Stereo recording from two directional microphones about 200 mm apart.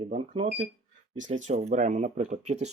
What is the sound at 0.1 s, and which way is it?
Speech, 40° right (ahead or behind).